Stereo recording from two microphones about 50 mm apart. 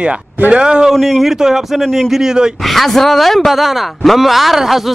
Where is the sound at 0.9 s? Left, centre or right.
Centre.